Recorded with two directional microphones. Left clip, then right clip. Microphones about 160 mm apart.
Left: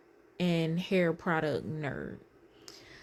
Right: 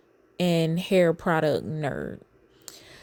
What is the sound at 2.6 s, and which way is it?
Whispering, 50° right (ahead or behind).